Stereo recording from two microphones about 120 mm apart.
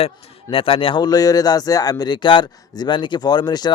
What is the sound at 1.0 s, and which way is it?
Speech, 30° left (ahead or behind).